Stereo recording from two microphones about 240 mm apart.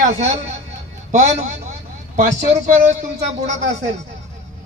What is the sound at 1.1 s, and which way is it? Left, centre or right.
A man's voice, right.